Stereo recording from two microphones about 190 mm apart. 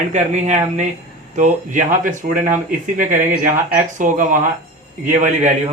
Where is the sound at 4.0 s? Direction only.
40° right (ahead or behind).